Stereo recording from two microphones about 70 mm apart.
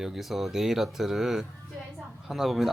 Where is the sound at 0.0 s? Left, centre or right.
Centre.